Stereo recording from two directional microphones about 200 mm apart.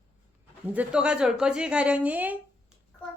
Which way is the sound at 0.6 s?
10° right (ahead or behind).